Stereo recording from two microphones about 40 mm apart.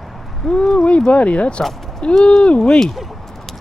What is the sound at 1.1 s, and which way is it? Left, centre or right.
Speech, left.